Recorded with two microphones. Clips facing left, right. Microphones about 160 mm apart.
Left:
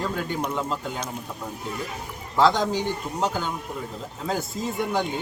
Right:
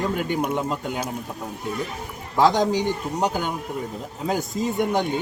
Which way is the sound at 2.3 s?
15° right (ahead or behind).